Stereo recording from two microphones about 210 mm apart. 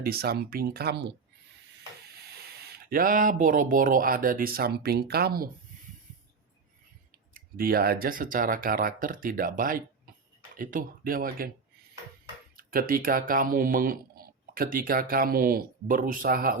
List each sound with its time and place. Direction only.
0.0 s speech: 45° right (ahead or behind)
2.2 s speech: 50° right (ahead or behind)
7.3 s speech: 45° right (ahead or behind)
12.5 s speech: 45° right (ahead or behind)